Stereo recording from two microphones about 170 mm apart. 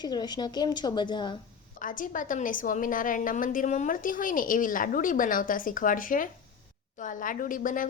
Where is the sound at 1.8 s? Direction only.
50° left (ahead or behind).